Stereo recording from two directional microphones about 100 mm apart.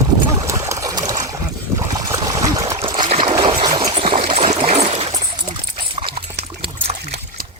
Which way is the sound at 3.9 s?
70° right (ahead or behind).